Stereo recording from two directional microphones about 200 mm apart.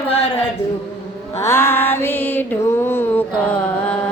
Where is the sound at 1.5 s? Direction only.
10° left (ahead or behind).